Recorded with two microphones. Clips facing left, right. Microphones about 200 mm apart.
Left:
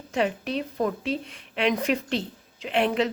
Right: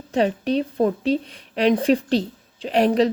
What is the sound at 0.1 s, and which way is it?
A woman's voice, 35° right (ahead or behind).